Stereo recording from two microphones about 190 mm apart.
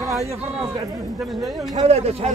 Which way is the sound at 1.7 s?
35° right (ahead or behind).